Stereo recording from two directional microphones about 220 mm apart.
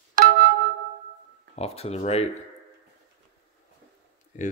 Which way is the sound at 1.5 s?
30° left (ahead or behind).